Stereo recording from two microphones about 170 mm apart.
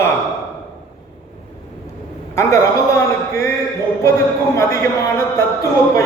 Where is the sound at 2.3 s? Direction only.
15° left (ahead or behind).